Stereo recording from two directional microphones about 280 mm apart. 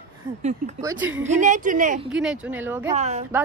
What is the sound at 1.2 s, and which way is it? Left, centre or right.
Speech, right.